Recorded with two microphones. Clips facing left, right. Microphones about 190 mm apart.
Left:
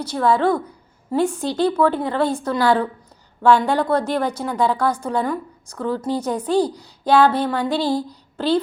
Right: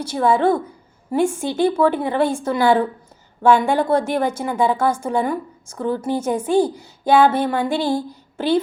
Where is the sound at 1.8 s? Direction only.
10° right (ahead or behind).